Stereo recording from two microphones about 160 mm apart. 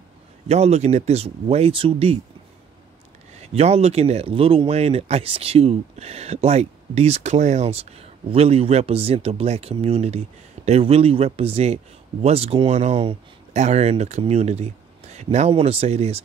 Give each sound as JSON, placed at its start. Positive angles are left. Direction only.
{"t": 0.5, "sound": "speech", "side_deg": -40}
{"t": 3.3, "sound": "speech", "side_deg": -40}